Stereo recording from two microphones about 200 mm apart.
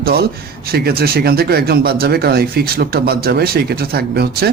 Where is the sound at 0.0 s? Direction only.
50° right (ahead or behind).